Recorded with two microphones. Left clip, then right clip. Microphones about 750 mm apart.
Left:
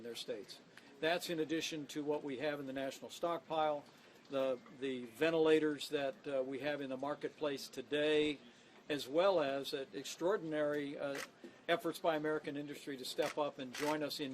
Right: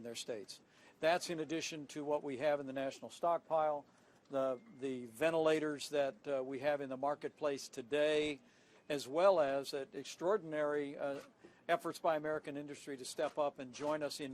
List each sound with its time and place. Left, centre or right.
0.3 s a man's voice: left